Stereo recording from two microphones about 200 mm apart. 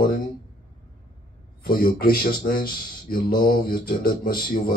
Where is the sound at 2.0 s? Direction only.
45° left (ahead or behind).